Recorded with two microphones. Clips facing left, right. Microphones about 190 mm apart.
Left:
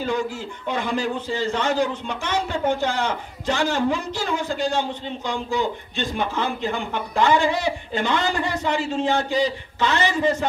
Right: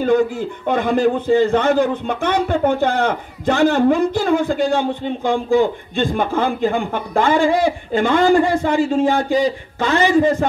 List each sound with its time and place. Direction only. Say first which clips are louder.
0.0 s a man's voice: right 9 dB; 55° right (ahead or behind)